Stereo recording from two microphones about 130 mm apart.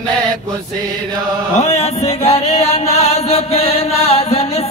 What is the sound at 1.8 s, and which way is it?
Chant, 55° left (ahead or behind).